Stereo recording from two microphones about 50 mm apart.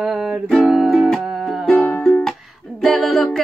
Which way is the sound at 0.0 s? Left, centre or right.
Centre.